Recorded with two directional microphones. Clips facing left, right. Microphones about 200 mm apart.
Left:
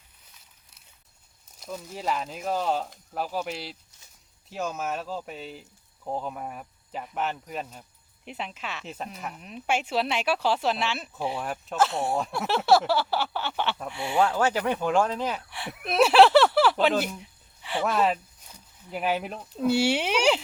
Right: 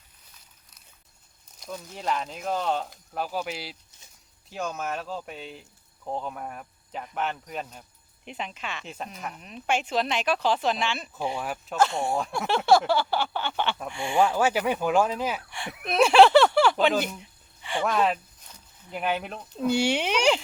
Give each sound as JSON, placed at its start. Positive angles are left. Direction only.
{"t": 1.5, "sound": "speech", "side_deg": 5}
{"t": 14.2, "sound": "speech", "side_deg": -10}